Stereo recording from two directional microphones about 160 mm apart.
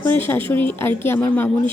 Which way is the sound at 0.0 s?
15° left (ahead or behind).